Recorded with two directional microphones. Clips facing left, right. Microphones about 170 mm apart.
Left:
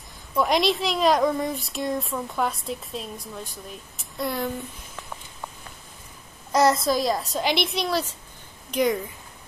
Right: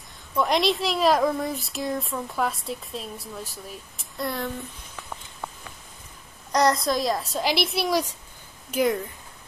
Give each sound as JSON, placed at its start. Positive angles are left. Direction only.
{"t": 0.4, "sound": "speech", "side_deg": 0}
{"t": 6.5, "sound": "speech", "side_deg": 5}
{"t": 8.7, "sound": "speech", "side_deg": 0}